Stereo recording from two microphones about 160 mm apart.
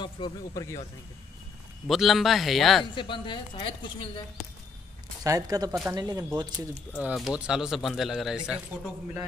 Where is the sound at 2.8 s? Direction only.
30° left (ahead or behind).